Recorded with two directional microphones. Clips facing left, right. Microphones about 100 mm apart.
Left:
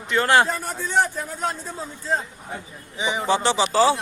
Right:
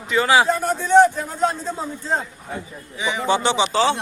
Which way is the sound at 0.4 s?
20° right (ahead or behind).